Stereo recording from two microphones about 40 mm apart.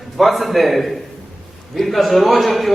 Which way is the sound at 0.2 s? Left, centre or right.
Centre.